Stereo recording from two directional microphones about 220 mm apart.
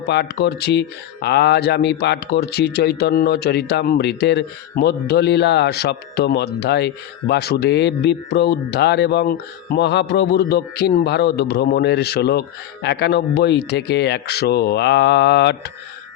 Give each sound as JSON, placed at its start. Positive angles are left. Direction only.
{"t": 0.0, "sound": "speech", "side_deg": 50}